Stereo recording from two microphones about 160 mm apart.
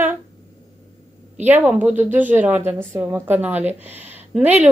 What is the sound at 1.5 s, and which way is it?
Speech, 10° right (ahead or behind).